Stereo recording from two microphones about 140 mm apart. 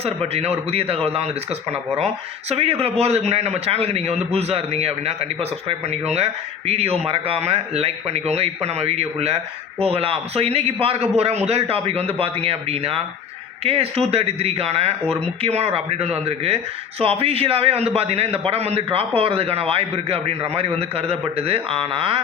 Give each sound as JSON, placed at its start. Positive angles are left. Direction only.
{"t": 0.0, "sound": "a man's voice", "side_deg": -45}